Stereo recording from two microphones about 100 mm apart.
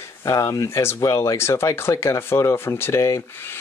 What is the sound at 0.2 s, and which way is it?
Speech, 30° left (ahead or behind).